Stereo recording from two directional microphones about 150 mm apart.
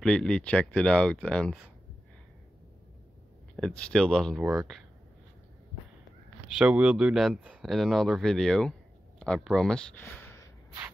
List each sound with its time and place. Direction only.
0.0 s speech: 5° left (ahead or behind)
3.5 s speech: 5° left (ahead or behind)
4.4 s speech: 15° right (ahead or behind)
6.6 s speech: 5° right (ahead or behind)
10.0 s a sound: 15° left (ahead or behind)